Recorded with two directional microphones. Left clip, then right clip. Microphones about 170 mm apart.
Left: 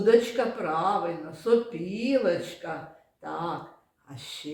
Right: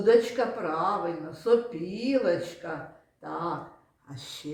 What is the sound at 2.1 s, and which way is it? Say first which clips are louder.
Speech: left 1 dB; 20° left (ahead or behind).